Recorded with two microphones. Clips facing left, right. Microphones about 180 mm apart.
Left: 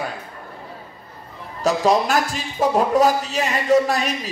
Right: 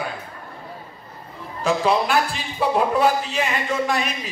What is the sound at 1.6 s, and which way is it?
A man's voice, 40° left (ahead or behind).